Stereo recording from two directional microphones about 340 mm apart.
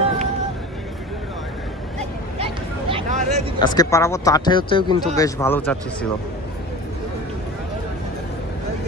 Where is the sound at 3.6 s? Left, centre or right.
Centre.